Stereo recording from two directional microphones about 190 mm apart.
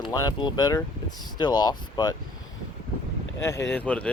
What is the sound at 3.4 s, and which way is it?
Speech, 15° left (ahead or behind).